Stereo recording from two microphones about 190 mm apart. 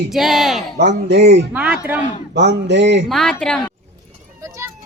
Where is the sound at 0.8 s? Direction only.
60° right (ahead or behind).